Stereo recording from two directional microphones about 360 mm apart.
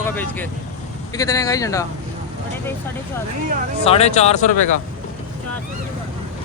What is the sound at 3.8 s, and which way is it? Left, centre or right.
Speech, centre.